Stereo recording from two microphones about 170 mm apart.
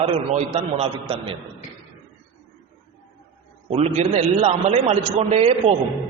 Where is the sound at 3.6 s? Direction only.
40° right (ahead or behind).